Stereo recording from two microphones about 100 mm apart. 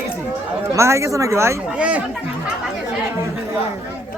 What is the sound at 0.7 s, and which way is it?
Speech, 30° right (ahead or behind).